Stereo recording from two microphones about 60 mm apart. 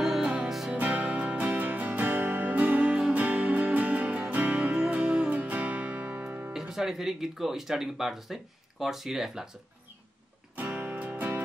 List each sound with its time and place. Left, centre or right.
0.0 s music: centre
0.7 s music: right
4.6 s music: centre
6.5 s speech: centre
10.8 s music: right